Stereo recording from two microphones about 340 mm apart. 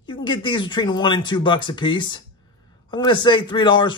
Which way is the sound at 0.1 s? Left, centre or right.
Centre.